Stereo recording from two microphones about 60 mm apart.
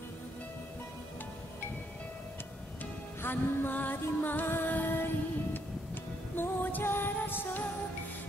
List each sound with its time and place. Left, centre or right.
3.2 s music: left